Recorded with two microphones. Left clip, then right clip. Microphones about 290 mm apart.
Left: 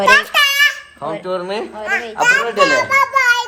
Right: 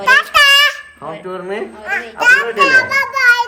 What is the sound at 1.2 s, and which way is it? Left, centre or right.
Speech, centre.